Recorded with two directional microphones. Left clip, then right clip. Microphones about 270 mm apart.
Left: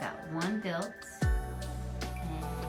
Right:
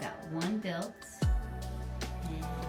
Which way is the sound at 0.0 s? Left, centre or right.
Centre.